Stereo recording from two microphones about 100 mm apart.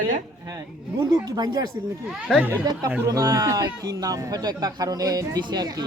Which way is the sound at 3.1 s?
35° right (ahead or behind).